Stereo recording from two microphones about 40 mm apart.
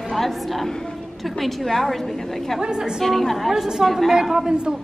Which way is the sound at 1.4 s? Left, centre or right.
Centre.